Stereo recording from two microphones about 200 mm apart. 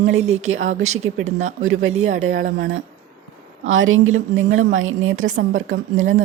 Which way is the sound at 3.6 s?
75° right (ahead or behind).